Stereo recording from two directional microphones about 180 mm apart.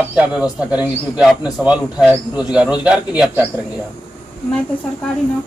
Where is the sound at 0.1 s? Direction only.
5° right (ahead or behind).